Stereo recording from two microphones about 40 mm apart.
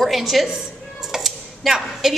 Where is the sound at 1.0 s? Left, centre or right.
Centre.